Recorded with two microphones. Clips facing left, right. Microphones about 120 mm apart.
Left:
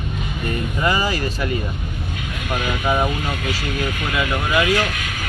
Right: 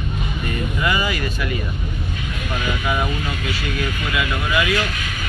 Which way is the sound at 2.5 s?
35° left (ahead or behind).